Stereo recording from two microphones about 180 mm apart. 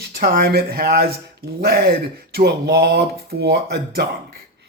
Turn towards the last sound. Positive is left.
turn(degrees=-65)  # may be behind; listen again after turning